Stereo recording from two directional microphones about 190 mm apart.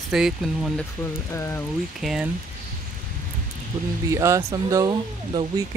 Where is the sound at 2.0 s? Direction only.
Centre (ahead or behind).